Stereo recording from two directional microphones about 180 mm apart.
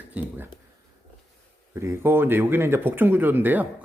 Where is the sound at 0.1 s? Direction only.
10° right (ahead or behind).